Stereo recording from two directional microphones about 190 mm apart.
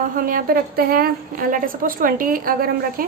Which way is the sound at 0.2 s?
50° right (ahead or behind).